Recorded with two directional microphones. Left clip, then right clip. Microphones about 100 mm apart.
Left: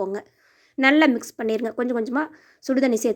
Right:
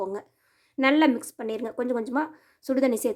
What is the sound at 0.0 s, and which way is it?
Speech, 30° left (ahead or behind).